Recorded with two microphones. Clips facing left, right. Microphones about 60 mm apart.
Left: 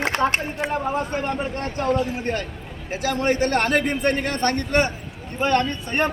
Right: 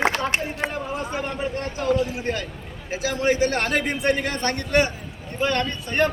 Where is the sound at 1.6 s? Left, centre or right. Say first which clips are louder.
Right 1 dB; left.